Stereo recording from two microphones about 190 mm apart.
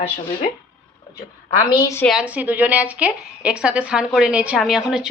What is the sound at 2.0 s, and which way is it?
A woman's voice, 5° right (ahead or behind).